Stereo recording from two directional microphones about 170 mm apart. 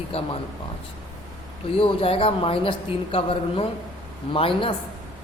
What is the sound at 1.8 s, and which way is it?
A woman's voice, 30° left (ahead or behind).